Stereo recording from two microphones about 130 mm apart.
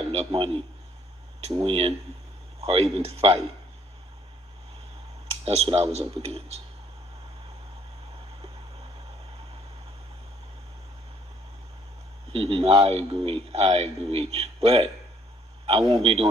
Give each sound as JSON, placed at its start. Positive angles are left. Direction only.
{"t": 0.1, "sound": "speech", "side_deg": -50}
{"t": 5.4, "sound": "speech", "side_deg": -50}
{"t": 12.3, "sound": "speech", "side_deg": -45}
{"t": 15.9, "sound": "speech", "side_deg": -45}